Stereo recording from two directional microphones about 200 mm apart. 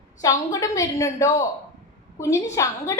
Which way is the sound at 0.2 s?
15° left (ahead or behind).